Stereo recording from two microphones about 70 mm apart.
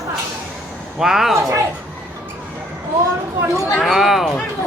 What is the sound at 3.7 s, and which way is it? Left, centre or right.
Speech, centre.